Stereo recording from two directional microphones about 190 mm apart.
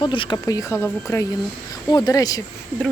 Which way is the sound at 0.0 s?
25° left (ahead or behind).